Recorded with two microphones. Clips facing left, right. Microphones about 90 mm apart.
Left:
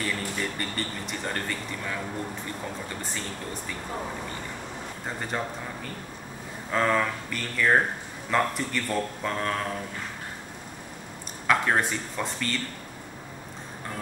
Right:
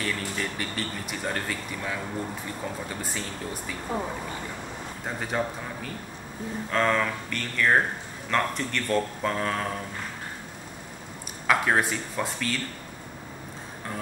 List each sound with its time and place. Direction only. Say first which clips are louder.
0.0 s speech: even; centre (ahead or behind)
5.0 s speech: right 2 dB; 5° right (ahead or behind)
6.7 s speech: even; 5° left (ahead or behind)
11.4 s speech: right 1 dB; 5° right (ahead or behind)